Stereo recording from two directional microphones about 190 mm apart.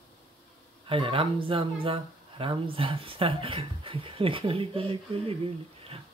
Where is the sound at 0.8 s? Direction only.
30° right (ahead or behind).